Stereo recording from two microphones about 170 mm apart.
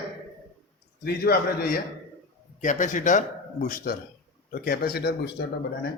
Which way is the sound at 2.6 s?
45° left (ahead or behind).